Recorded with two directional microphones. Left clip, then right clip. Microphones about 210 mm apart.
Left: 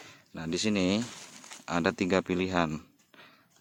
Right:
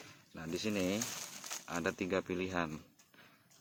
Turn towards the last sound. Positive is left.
turn(degrees=50)  # may be behind; listen again after turning